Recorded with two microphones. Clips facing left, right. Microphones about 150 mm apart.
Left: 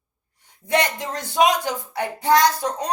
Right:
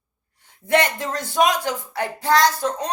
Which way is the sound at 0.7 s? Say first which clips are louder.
Right 2 dB; 15° left (ahead or behind).